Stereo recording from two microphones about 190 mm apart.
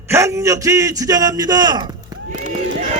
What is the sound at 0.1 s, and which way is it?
A man's voice, 15° right (ahead or behind).